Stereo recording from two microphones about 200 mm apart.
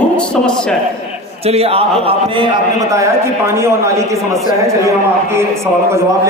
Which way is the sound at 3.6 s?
15° right (ahead or behind).